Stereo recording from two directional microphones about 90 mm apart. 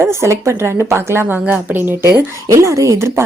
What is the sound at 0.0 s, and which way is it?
Speech, 30° right (ahead or behind).